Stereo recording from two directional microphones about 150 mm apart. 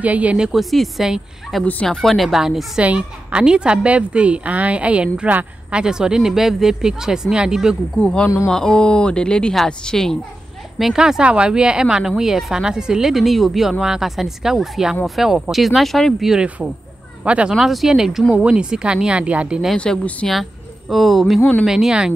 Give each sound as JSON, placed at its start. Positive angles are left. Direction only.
{"t": 0.0, "sound": "a woman's voice", "side_deg": -10}
{"t": 8.0, "sound": "a woman's voice", "side_deg": 5}